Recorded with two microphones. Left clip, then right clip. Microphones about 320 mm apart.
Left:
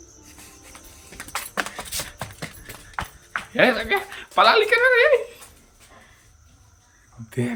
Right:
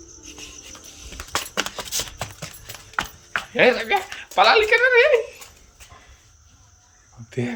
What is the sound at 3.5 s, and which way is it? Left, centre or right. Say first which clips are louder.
Speech: right 1 dB; centre.